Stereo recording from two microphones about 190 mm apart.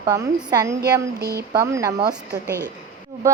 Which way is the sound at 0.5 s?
15° right (ahead or behind).